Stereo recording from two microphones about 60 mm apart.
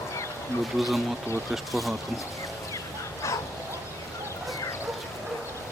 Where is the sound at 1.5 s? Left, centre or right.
Centre.